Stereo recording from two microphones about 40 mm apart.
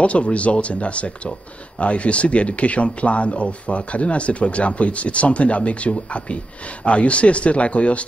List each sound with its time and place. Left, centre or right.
0.0 s speech: left